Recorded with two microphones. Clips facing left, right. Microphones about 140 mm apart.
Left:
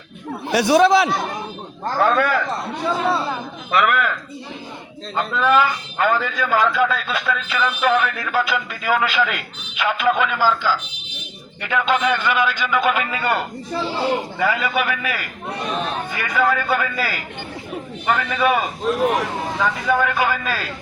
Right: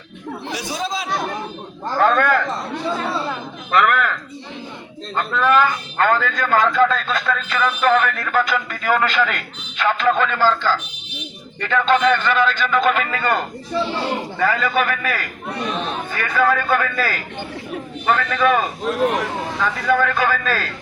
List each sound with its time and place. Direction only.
0.5 s speech: 70° left (ahead or behind)
2.0 s a man's voice: 10° left (ahead or behind)
3.7 s speech: 10° left (ahead or behind)
5.1 s a man's voice: 10° left (ahead or behind)
14.3 s a man's voice: 10° left (ahead or behind)
15.7 s speech: centre (ahead or behind)
16.1 s a man's voice: 15° left (ahead or behind)
19.8 s a man's voice: 15° left (ahead or behind)